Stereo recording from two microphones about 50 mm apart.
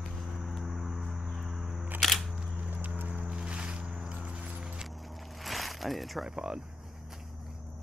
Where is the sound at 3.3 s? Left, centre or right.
Centre.